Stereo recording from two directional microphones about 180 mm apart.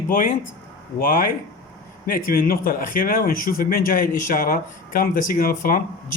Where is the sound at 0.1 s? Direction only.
50° left (ahead or behind).